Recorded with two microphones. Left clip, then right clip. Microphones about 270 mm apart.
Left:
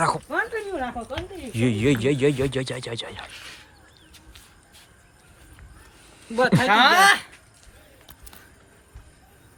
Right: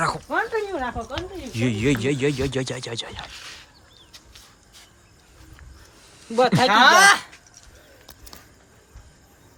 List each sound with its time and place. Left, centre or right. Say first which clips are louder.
0.3 s speech: right 2 dB; centre
6.2 s speech: right 2 dB; right
6.5 s speech: right 2 dB; centre